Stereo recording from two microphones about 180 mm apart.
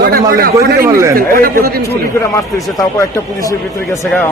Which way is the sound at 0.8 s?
15° right (ahead or behind).